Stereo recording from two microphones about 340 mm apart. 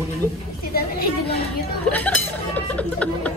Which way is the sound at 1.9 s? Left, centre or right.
Centre.